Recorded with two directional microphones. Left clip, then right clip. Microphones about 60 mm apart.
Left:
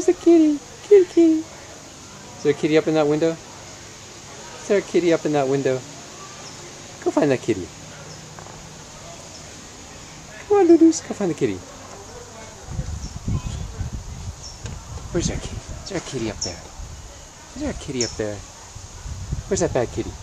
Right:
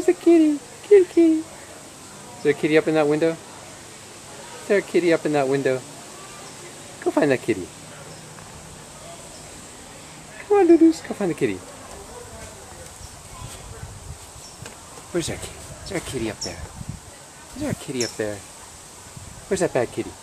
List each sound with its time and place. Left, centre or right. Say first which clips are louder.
0.0 s a sound: left 1 dB; left
2.4 s speech: even; left
4.6 s speech: even; left
7.0 s speech: even; left
10.5 s a sound: left 1 dB; left
11.1 s speech: left 1 dB; left
15.1 s speech: left 1 dB; centre
18.0 s speech: left 1 dB; centre
19.5 s speech: even; centre